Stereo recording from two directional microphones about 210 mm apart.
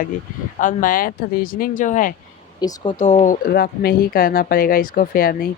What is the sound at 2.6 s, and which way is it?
Speech, 20° left (ahead or behind).